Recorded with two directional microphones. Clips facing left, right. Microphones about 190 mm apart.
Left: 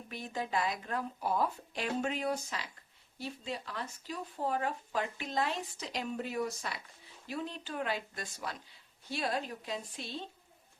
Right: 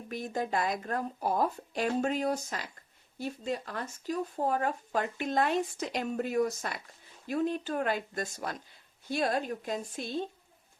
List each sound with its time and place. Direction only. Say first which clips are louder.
0.1 s speech: right 4 dB; 45° right (ahead or behind)